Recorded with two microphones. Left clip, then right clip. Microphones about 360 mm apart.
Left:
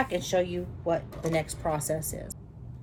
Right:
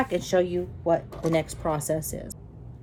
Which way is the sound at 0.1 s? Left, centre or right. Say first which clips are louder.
Right 3 dB; centre.